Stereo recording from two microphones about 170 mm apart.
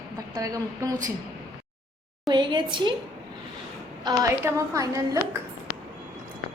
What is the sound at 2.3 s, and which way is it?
Speech, 25° right (ahead or behind).